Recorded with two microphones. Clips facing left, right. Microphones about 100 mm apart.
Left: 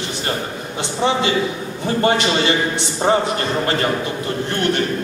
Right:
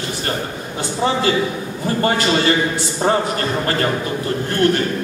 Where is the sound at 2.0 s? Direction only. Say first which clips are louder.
Even; 25° left (ahead or behind).